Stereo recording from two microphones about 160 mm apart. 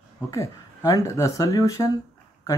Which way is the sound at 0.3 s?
20° left (ahead or behind).